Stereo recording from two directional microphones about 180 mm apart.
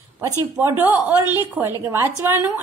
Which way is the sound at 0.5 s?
10° right (ahead or behind).